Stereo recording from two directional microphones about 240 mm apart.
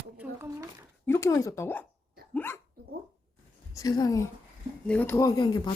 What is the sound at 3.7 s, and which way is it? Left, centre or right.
Speech, centre.